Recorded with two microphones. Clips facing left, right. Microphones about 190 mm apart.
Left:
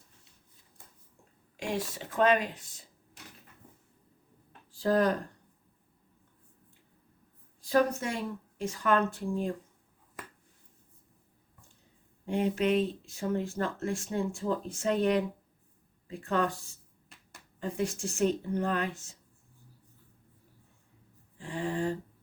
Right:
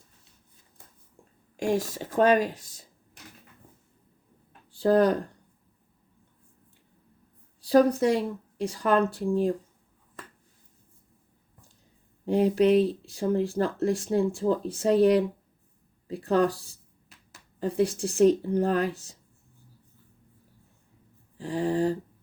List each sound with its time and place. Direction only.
1.5 s speech: 45° right (ahead or behind)
4.7 s speech: 30° right (ahead or behind)
7.6 s speech: 35° right (ahead or behind)
12.2 s speech: 35° right (ahead or behind)
21.3 s a sound: 35° right (ahead or behind)